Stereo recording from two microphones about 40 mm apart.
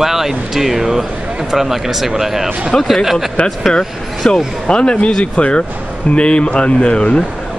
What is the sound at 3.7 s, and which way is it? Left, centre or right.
A man's voice, left.